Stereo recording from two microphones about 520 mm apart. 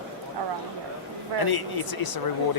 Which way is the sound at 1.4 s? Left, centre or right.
Left.